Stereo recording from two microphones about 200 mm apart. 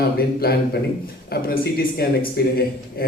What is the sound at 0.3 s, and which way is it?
A man's voice, 50° left (ahead or behind).